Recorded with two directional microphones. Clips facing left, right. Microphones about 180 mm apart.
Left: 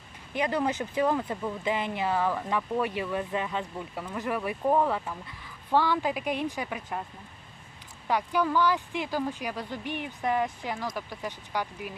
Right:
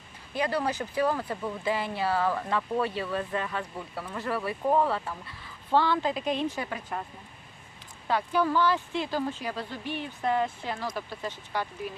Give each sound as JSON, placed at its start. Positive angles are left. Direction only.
{"t": 0.3, "sound": "speech", "side_deg": 20}
{"t": 8.0, "sound": "speech", "side_deg": 15}